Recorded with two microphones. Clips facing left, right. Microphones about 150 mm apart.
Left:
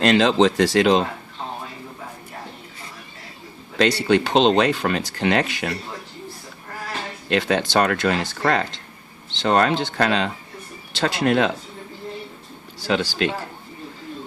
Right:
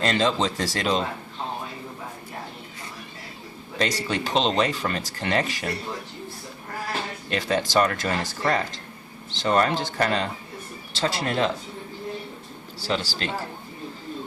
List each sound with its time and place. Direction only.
0.0 s speech: 75° left (ahead or behind)
3.8 s speech: 70° left (ahead or behind)
7.3 s speech: 70° left (ahead or behind)
10.9 s speech: 65° left (ahead or behind)
12.8 s speech: 60° left (ahead or behind)